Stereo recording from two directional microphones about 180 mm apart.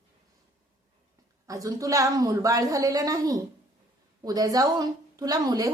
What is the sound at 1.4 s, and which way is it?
A woman's voice, 20° right (ahead or behind).